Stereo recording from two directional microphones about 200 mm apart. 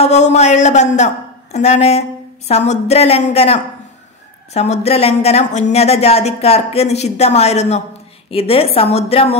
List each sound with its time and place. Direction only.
0.0 s a woman's voice: 35° left (ahead or behind)